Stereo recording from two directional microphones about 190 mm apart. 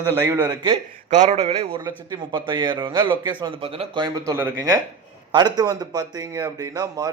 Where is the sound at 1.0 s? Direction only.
40° right (ahead or behind).